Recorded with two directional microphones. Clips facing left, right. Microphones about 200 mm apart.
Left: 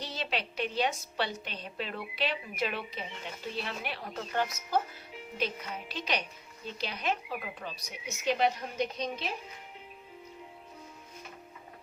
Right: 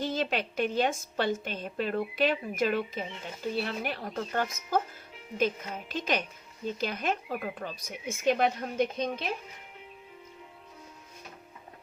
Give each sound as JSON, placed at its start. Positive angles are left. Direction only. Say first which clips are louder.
{"t": 0.0, "sound": "a woman's voice", "louder": "right 6 dB", "side_deg": -50}